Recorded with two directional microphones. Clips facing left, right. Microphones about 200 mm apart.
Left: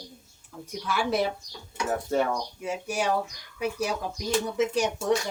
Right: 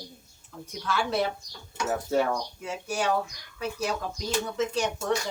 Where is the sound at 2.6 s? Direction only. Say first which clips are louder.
Left 1 dB; 15° left (ahead or behind).